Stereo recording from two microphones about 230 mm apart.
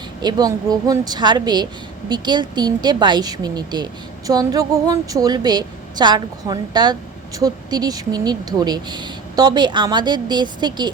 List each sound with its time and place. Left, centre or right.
0.2 s speech: centre